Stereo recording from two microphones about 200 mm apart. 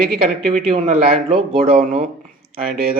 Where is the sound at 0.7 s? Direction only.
30° right (ahead or behind).